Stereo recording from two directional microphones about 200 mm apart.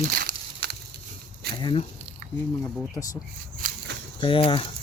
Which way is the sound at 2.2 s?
45° right (ahead or behind).